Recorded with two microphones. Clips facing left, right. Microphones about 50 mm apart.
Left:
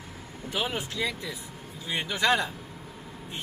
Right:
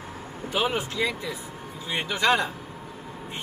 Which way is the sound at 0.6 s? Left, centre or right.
Right.